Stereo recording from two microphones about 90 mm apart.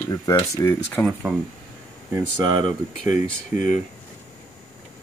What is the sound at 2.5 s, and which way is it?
Speech, 50° right (ahead or behind).